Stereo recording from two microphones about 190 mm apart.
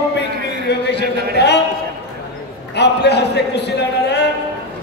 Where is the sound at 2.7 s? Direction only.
60° left (ahead or behind).